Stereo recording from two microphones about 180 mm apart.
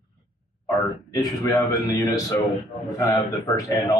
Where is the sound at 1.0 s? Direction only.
20° left (ahead or behind).